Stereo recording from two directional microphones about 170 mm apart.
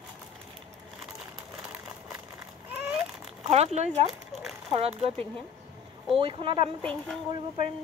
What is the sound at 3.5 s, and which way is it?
Speech, 40° right (ahead or behind).